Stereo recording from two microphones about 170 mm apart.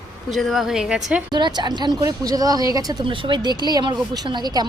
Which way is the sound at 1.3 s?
25° right (ahead or behind).